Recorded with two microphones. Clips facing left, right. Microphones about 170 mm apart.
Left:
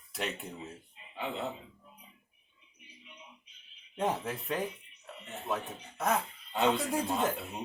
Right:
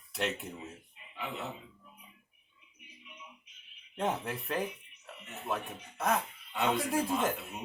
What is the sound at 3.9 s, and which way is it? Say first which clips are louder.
Speech: left 1 dB; centre (ahead or behind).